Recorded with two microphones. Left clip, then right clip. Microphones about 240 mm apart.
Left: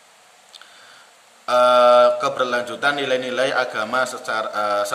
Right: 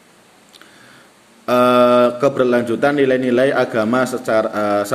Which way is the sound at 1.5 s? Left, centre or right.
Centre.